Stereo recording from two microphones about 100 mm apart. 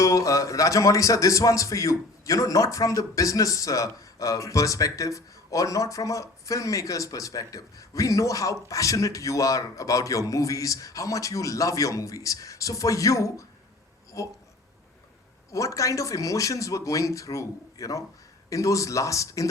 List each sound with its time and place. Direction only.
0.0 s a man's voice: 35° left (ahead or behind)
15.5 s a man's voice: 35° left (ahead or behind)